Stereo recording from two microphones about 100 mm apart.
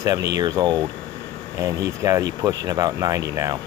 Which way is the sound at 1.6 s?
35° right (ahead or behind).